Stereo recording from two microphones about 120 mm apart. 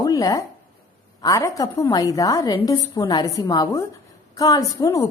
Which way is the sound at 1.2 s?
25° left (ahead or behind).